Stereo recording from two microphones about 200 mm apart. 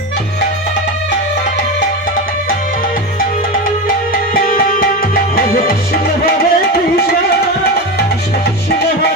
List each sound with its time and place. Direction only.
3.2 s music: 45° left (ahead or behind)